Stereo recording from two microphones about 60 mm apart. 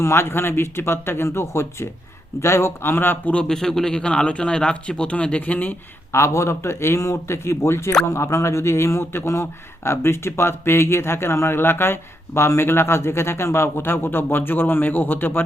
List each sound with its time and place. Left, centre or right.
0.0 s speech: left
3.3 s a man's voice: centre
6.1 s speech: left